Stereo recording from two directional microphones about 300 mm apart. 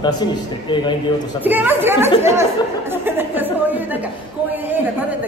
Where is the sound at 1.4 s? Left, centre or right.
Centre.